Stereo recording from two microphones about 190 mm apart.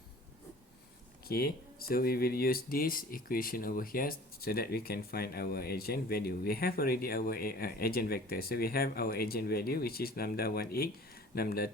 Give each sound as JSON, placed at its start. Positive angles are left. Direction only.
{"t": 1.3, "sound": "speech", "side_deg": 50}